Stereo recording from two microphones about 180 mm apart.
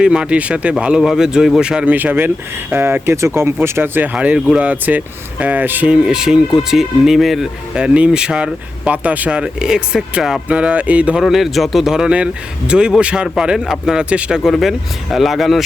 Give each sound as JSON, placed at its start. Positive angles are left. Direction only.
{"t": 0.0, "sound": "speech", "side_deg": -5}